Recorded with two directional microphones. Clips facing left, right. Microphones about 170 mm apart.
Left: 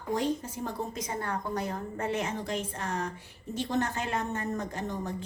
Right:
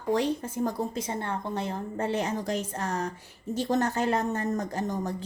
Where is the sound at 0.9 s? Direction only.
30° right (ahead or behind).